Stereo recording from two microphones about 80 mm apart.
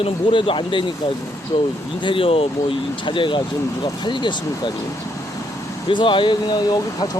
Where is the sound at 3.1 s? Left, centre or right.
Left.